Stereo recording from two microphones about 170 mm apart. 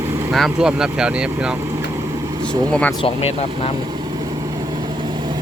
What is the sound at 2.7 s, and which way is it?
Speech, 5° left (ahead or behind).